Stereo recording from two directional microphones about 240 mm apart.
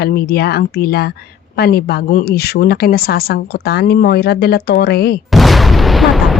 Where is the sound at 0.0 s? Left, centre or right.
Left.